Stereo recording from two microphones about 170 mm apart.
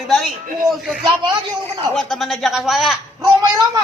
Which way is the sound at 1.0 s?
25° right (ahead or behind).